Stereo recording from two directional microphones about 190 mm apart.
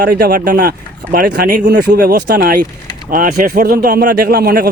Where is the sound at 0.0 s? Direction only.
50° right (ahead or behind).